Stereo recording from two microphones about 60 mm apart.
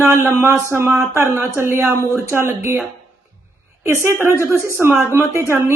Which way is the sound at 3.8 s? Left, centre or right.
Right.